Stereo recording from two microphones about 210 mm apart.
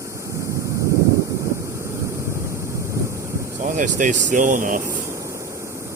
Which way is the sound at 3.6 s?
40° right (ahead or behind).